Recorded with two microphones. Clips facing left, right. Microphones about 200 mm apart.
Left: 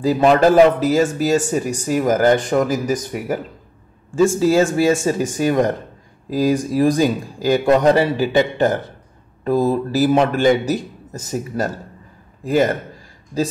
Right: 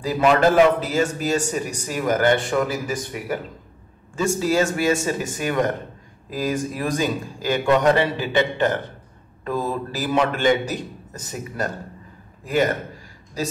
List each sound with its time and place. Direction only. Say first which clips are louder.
0.2 s a man's voice: left 3 dB; 40° left (ahead or behind)
4.4 s a man's voice: left 6 dB; 30° left (ahead or behind)